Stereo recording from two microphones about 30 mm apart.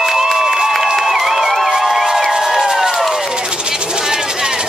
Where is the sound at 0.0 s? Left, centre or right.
Centre.